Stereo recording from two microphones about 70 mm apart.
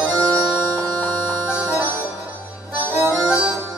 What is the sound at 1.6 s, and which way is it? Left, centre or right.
Music, right.